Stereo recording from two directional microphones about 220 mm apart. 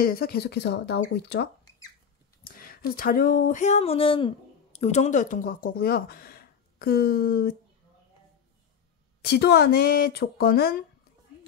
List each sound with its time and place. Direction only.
0.0 s speech: 45° left (ahead or behind)
9.2 s speech: 45° left (ahead or behind)